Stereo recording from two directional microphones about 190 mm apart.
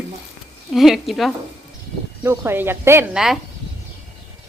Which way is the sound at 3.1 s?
Centre (ahead or behind).